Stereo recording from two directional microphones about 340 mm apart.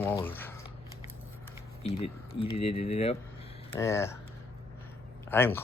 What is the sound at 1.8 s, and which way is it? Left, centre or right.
Speech, centre.